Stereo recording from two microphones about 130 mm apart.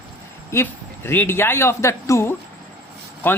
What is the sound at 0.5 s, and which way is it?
A man's voice, 20° left (ahead or behind).